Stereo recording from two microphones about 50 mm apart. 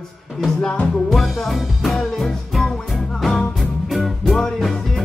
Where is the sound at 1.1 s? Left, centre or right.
Centre.